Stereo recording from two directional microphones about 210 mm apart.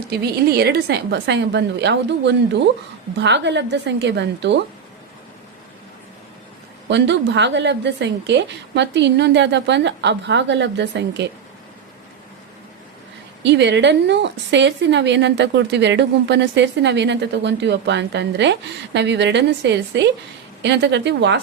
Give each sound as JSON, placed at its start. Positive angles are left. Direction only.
{"t": 0.1, "sound": "a woman's voice", "side_deg": -50}
{"t": 6.8, "sound": "a woman's voice", "side_deg": -55}
{"t": 13.4, "sound": "a woman's voice", "side_deg": -55}